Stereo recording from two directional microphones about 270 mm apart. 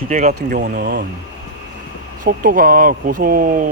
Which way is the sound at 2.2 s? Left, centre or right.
Right.